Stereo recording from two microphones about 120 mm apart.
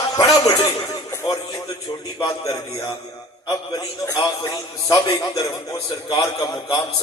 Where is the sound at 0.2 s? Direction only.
30° left (ahead or behind).